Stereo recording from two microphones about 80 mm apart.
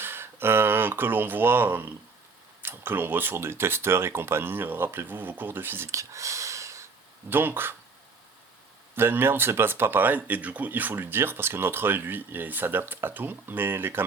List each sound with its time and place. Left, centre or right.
0.0 s speech: right
5.9 s a sound: right
7.3 s speech: right
9.0 s speech: right